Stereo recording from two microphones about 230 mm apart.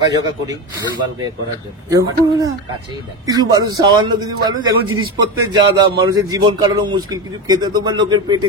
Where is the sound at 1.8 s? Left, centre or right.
Centre.